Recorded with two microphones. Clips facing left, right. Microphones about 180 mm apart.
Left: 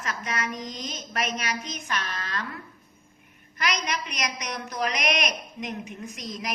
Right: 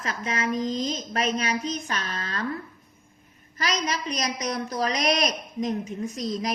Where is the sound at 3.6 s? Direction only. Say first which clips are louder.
Right 2 dB; 30° right (ahead or behind).